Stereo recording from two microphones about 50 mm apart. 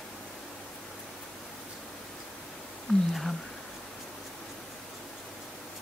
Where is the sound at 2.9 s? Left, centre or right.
Left.